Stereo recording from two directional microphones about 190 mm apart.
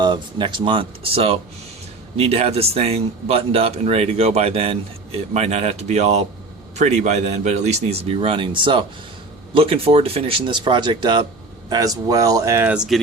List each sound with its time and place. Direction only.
0.0 s speech: 25° right (ahead or behind); by 13.0 s 5° right (ahead or behind)